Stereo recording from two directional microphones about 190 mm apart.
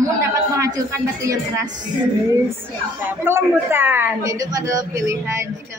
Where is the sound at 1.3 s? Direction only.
15° right (ahead or behind).